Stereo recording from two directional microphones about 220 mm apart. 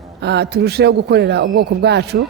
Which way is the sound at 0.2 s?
50° right (ahead or behind).